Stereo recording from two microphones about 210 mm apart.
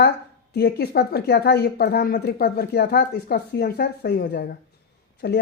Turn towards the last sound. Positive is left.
turn(degrees=50)  # may be behind; listen again after turning